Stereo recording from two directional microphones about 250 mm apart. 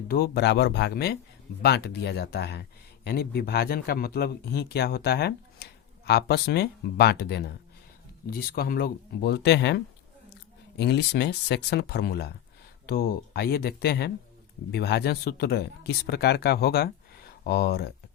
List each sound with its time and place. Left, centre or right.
0.1 s speech: left